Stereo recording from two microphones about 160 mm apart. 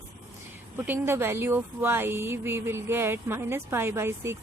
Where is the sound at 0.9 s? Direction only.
15° right (ahead or behind).